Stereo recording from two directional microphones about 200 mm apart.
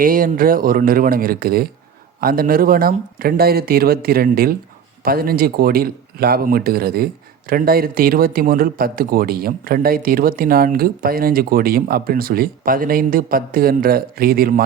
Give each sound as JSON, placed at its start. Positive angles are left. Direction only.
{"t": 0.0, "sound": "speech", "side_deg": -45}